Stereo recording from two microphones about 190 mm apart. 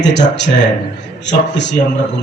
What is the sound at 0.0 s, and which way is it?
Music, 65° left (ahead or behind).